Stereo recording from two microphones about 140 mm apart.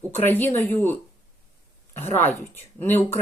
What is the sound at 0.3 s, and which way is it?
Speech, 15° left (ahead or behind).